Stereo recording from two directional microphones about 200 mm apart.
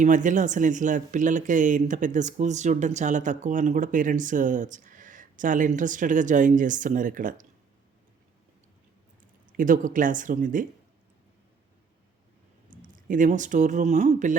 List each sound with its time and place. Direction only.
0.0 s speech: 40° right (ahead or behind)
9.5 s speech: 40° right (ahead or behind)
12.7 s speech: 40° right (ahead or behind)